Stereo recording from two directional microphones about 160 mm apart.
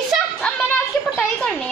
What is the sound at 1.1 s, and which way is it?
Speech, 10° left (ahead or behind).